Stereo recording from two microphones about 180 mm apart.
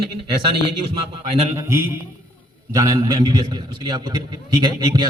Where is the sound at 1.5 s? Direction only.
15° right (ahead or behind).